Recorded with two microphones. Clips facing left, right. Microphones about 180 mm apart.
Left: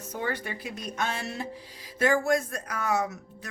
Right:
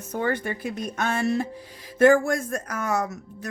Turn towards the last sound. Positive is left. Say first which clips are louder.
# right 2 dB
turn(degrees=-45)  # may be behind; listen again after turning